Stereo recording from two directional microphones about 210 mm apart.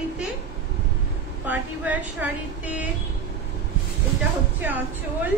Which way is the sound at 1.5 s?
5° right (ahead or behind).